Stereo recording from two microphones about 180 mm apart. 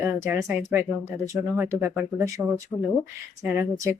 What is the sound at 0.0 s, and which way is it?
Speech, 10° right (ahead or behind).